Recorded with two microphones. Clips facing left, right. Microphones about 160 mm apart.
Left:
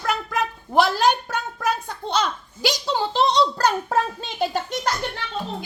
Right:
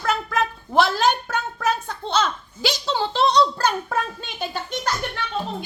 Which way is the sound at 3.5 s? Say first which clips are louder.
Left 2 dB; 40° left (ahead or behind).